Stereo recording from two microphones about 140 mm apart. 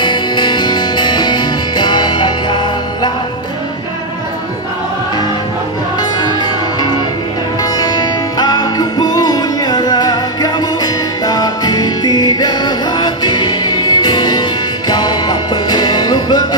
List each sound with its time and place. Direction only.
0.0 s music: 35° left (ahead or behind)
5.9 s music: 30° left (ahead or behind)